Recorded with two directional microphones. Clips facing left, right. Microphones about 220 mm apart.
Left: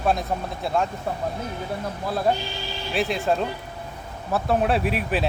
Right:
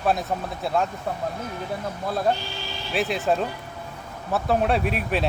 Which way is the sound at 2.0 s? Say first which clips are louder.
Left 1 dB; centre (ahead or behind).